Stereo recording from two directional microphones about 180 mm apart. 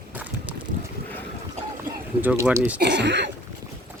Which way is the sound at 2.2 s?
10° right (ahead or behind).